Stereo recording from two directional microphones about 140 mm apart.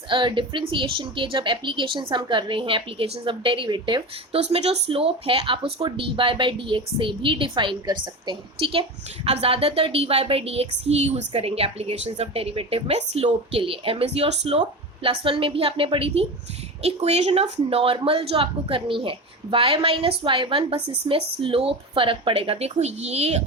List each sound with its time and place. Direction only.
0.1 s a woman's voice: 35° right (ahead or behind)
4.4 s a woman's voice: 50° right (ahead or behind)